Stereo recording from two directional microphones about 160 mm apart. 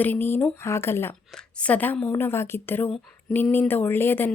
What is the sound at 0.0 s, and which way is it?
Speech, 10° left (ahead or behind).